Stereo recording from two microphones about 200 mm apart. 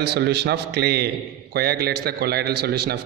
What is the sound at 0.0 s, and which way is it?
A man's voice, 55° right (ahead or behind).